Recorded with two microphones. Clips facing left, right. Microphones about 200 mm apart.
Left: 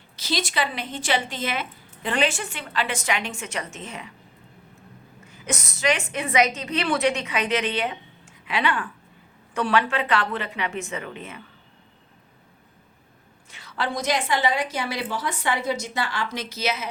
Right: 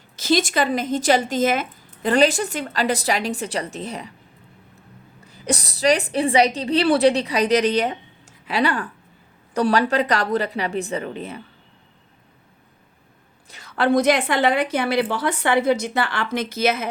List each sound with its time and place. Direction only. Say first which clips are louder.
0.2 s speech: right 7 dB; 50° right (ahead or behind)
5.2 s speech: right 6 dB; 35° right (ahead or behind)
13.5 s a woman's voice: right 10 dB; 45° right (ahead or behind)